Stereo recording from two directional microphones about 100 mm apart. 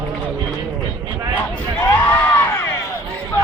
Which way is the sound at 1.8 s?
20° left (ahead or behind).